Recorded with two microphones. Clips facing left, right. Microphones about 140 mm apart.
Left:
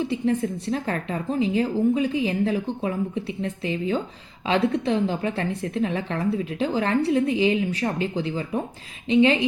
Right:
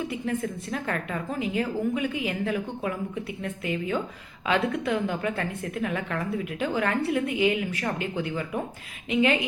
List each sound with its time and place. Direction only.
0.0 s a woman's voice: 30° left (ahead or behind)